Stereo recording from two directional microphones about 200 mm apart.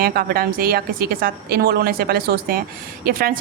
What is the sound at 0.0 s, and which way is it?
A woman's voice, 45° right (ahead or behind).